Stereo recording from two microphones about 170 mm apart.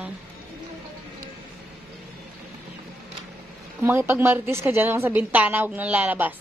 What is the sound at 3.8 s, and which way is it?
A woman's voice, 15° right (ahead or behind).